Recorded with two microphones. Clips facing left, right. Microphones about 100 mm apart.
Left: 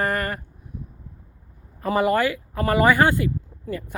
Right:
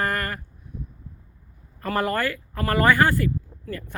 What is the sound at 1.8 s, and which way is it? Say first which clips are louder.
Speech: left 4 dB; 10° left (ahead or behind).